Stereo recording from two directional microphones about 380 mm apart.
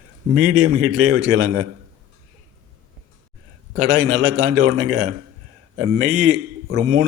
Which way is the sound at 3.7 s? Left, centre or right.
Right.